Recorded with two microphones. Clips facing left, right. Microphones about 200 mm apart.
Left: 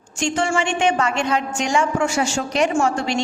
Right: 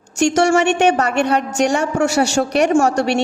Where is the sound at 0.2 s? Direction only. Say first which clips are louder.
Right 7 dB; 70° right (ahead or behind).